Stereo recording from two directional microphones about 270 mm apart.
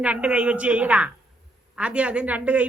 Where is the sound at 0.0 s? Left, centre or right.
Centre.